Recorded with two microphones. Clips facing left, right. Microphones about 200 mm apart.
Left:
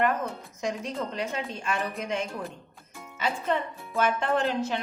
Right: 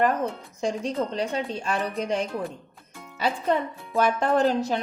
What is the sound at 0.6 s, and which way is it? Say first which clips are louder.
Speech: right 5 dB; 30° right (ahead or behind).